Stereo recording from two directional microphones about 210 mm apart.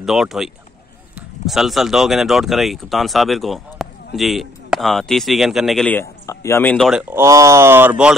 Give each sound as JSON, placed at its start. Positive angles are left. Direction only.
{"t": 0.0, "sound": "speech", "side_deg": 0}
{"t": 7.2, "sound": "speech", "side_deg": -15}